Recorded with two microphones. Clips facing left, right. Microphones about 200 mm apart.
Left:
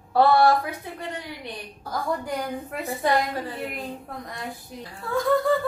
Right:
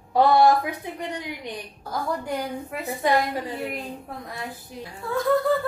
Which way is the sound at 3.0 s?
10° right (ahead or behind).